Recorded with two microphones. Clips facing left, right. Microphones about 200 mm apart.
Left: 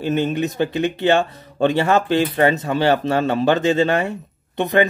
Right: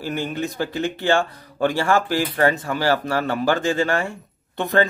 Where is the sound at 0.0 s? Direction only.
20° left (ahead or behind).